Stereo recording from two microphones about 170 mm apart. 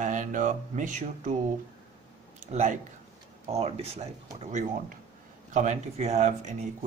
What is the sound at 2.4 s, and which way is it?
A man's voice, 45° right (ahead or behind).